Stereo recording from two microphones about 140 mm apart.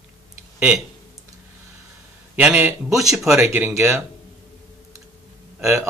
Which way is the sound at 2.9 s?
25° right (ahead or behind).